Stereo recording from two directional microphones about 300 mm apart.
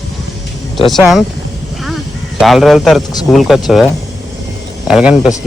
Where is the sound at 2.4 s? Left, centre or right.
Centre.